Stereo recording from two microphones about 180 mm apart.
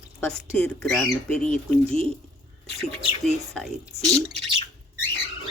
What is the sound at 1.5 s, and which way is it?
Speech, 40° left (ahead or behind).